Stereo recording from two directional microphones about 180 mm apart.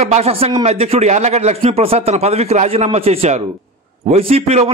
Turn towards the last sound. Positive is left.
turn(degrees=-35)  # may be behind; listen again after turning